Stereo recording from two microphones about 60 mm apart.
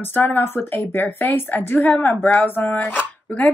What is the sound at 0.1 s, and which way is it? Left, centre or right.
Speech, left.